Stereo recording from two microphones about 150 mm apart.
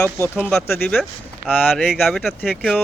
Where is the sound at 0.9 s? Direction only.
Centre (ahead or behind).